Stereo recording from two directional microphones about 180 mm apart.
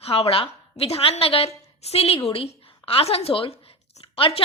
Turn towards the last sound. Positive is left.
turn(degrees=30)  # may be behind; listen again after turning